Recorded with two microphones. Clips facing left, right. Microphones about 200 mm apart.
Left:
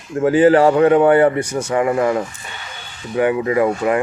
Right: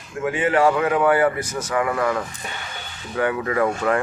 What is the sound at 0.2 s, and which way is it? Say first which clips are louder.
A man's voice: left 8 dB; 35° left (ahead or behind).